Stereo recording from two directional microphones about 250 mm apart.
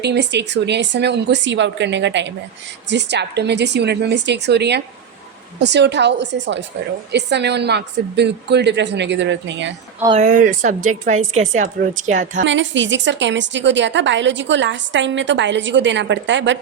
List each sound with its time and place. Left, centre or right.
0.0 s a woman's voice: right
10.0 s a woman's voice: right
12.4 s a woman's voice: right